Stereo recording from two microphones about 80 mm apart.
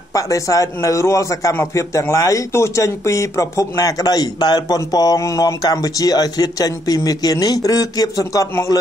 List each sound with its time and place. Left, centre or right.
0.1 s a man's voice: left
3.7 s a man's voice: left